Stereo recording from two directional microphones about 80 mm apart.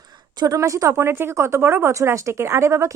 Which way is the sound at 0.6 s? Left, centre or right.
Right.